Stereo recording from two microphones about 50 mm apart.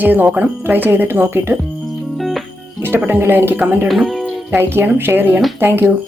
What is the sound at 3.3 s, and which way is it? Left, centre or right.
Speech, right.